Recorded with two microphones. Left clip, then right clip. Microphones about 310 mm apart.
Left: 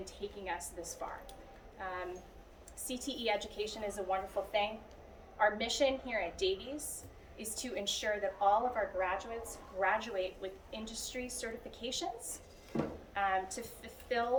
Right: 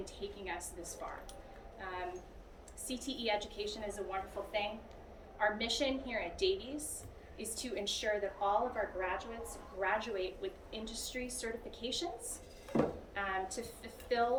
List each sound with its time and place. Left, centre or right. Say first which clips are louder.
0.0 s a woman's voice: left 1 dB; centre
12.7 s speech: right 5 dB; centre
13.1 s a woman's voice: left 5 dB; centre